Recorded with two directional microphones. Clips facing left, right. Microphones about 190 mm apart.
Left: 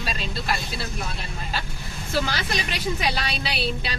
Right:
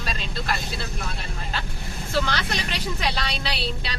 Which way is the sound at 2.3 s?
10° left (ahead or behind).